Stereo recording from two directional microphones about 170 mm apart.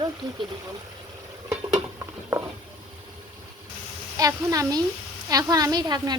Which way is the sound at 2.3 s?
20° right (ahead or behind).